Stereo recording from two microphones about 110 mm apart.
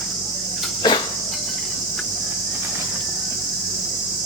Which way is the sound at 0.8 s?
40° left (ahead or behind).